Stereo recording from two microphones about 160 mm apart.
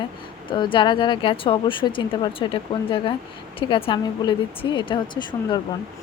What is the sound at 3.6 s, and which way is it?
Speech, 35° left (ahead or behind).